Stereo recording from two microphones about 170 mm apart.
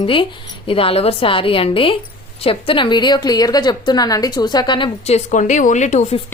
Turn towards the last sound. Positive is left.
turn(degrees=45)  # may be behind; listen again after turning